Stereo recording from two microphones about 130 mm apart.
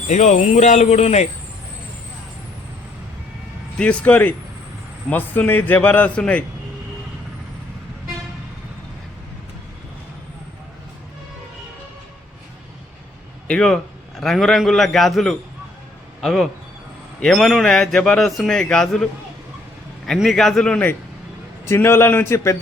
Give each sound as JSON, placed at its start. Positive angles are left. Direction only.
{"t": 0.1, "sound": "speech", "side_deg": 65}
{"t": 3.8, "sound": "a man's voice", "side_deg": 10}
{"t": 13.5, "sound": "a man's voice", "side_deg": 5}
{"t": 20.1, "sound": "a man's voice", "side_deg": 5}